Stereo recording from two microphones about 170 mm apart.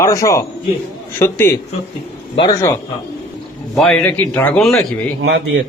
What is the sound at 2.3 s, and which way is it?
Speech, 25° left (ahead or behind).